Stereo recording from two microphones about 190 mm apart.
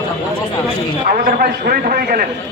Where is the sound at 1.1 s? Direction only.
50° right (ahead or behind).